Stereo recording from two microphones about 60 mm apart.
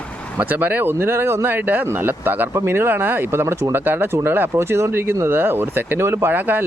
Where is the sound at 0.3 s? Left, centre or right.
Right.